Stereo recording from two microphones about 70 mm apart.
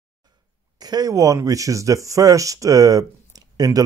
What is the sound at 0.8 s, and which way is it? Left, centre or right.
Speech, right.